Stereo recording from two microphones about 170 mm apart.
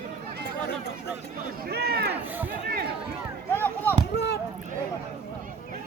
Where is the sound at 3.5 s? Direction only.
10° left (ahead or behind).